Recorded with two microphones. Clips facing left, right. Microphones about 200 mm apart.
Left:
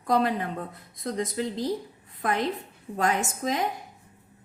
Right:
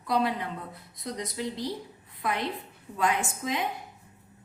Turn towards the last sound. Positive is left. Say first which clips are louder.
# left 3 dB
turn(degrees=45)  # may be behind; listen again after turning